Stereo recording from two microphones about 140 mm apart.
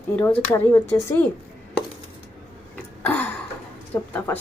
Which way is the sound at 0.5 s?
20° left (ahead or behind).